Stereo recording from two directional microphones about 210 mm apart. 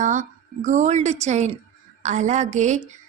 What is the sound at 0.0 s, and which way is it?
A woman's voice, 35° right (ahead or behind).